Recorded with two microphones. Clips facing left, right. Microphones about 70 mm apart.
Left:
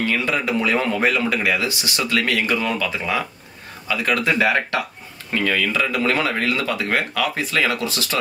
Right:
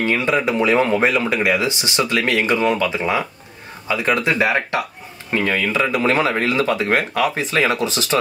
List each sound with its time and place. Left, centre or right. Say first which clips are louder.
0.0 s speech: right 3 dB; right